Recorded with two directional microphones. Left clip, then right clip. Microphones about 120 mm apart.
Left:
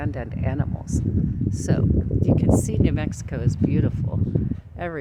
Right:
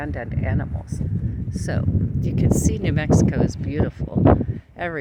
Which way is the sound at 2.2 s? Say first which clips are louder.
Left 1 dB; 5° left (ahead or behind).